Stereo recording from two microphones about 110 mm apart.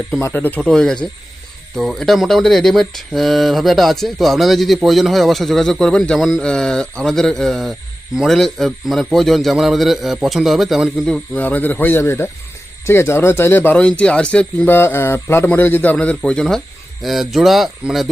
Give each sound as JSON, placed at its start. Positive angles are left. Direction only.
{"t": 0.2, "sound": "speech", "side_deg": 20}
{"t": 0.6, "sound": "speech", "side_deg": 5}
{"t": 11.0, "sound": "speech", "side_deg": 10}